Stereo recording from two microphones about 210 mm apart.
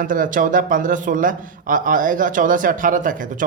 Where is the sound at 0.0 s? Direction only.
40° right (ahead or behind).